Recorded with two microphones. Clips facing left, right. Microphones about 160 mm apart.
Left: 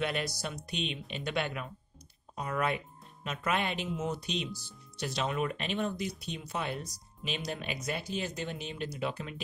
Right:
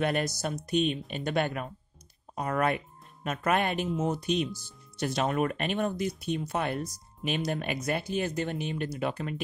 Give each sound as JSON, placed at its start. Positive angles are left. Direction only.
{"t": 0.0, "sound": "speech", "side_deg": -45}